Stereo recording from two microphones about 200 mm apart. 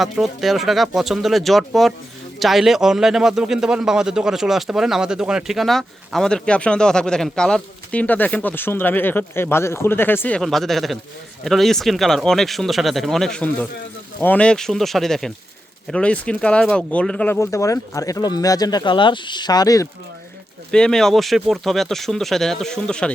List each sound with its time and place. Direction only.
0.0 s a man's voice: centre (ahead or behind); by 19.9 s 15° left (ahead or behind)
20.7 s a man's voice: 5° left (ahead or behind)